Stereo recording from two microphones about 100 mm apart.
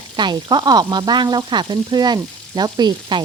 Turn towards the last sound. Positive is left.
turn(degrees=-50)  # may be behind; listen again after turning